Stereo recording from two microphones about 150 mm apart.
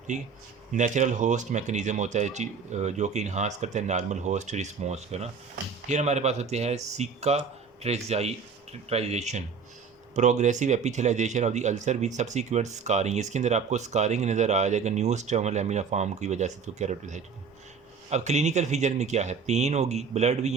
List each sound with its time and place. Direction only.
0.1 s speech: 55° right (ahead or behind)